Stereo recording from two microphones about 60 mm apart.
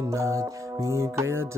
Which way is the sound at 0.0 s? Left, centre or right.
Right.